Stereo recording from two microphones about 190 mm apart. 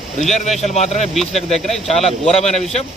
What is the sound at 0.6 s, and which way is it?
Speech, 35° left (ahead or behind).